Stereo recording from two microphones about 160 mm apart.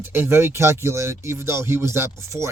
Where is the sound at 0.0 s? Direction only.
15° right (ahead or behind).